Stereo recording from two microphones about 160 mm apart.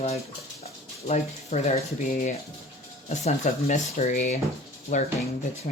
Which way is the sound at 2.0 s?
60° left (ahead or behind).